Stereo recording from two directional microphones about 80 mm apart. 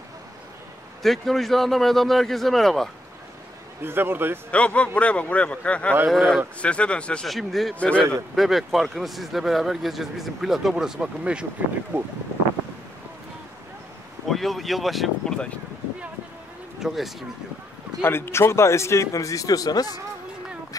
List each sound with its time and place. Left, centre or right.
1.0 s speech: centre
3.8 s a man's voice: right
4.5 s a man's voice: centre
6.0 s speech: centre
6.6 s a man's voice: centre
7.2 s speech: centre
11.9 s a man's voice: right
14.3 s speech: centre
16.8 s speech: centre
18.0 s speech: left